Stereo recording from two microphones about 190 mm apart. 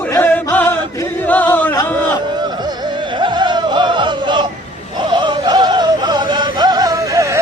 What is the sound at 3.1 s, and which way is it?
Music, 25° right (ahead or behind).